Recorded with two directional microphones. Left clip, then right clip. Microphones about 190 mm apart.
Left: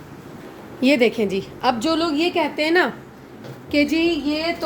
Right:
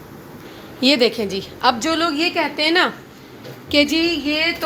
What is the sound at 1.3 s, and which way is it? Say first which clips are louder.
Speech: right 3 dB; 25° left (ahead or behind).